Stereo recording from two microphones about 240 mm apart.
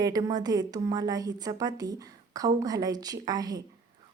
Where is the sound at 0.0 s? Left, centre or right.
Centre.